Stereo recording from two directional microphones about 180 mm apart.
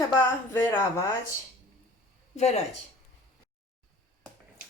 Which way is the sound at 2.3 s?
35° left (ahead or behind).